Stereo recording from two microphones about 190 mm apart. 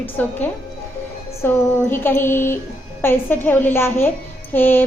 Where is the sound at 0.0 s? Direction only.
10° left (ahead or behind).